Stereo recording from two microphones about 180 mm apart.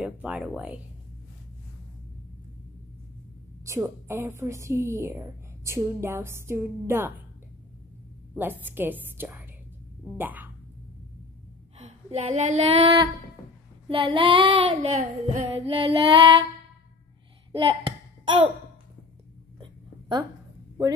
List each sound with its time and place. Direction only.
0.0 s a woman's voice: 5° right (ahead or behind)
3.6 s a woman's voice: 15° right (ahead or behind)
8.4 s a woman's voice: 10° right (ahead or behind)
11.8 s a woman's voice: 35° right (ahead or behind)
13.8 s child singing: 30° right (ahead or behind)
17.5 s child singing: 30° right (ahead or behind)
19.6 s a sound: 25° right (ahead or behind)